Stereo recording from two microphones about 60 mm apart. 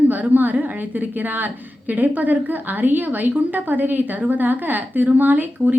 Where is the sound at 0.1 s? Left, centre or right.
Right.